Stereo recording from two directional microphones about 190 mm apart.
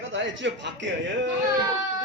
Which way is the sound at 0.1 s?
80° right.